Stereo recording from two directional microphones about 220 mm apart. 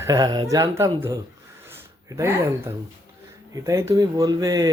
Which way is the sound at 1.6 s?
10° right (ahead or behind).